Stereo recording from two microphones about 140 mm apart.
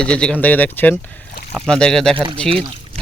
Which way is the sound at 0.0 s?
5° left (ahead or behind).